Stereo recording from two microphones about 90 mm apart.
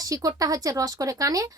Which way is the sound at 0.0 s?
40° right (ahead or behind).